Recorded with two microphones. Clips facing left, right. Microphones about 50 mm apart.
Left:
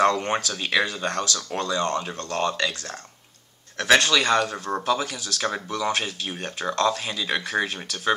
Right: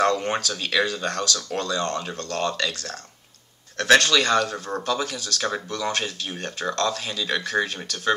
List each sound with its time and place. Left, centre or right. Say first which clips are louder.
0.0 s speech: left 1 dB; centre